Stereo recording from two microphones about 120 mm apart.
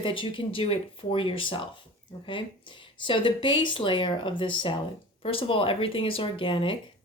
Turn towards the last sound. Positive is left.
turn(degrees=45)  # may be behind; listen again after turning